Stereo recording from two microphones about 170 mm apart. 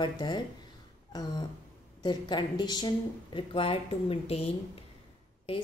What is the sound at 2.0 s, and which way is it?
A woman's voice, 25° left (ahead or behind).